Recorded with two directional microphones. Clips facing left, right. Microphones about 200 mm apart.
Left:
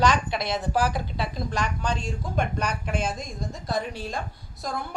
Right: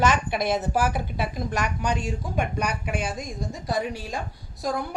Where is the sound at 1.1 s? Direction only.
15° right (ahead or behind).